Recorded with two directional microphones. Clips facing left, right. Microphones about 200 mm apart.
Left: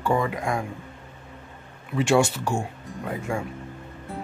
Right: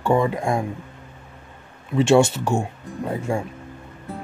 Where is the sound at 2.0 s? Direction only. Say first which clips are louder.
Right 5 dB; 25° right (ahead or behind).